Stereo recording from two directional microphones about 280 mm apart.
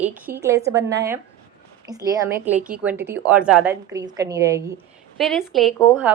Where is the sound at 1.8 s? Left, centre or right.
Centre.